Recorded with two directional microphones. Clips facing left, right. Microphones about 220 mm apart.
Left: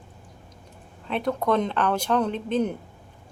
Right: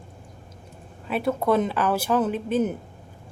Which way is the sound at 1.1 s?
5° right (ahead or behind).